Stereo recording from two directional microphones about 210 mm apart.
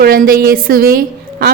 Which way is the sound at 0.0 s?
45° right (ahead or behind).